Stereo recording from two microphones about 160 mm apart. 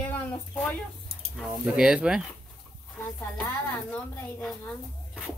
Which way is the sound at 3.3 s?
5° left (ahead or behind).